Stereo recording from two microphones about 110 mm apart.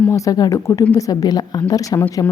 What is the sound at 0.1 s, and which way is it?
A woman's voice, 30° left (ahead or behind).